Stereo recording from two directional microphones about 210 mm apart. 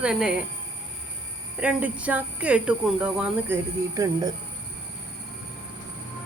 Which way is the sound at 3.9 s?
15° right (ahead or behind).